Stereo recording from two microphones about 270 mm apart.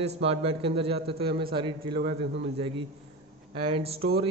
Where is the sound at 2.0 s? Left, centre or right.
Right.